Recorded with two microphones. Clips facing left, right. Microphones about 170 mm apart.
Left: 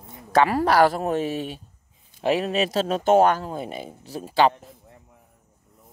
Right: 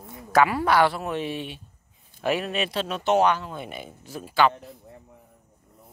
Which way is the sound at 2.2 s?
30° left (ahead or behind).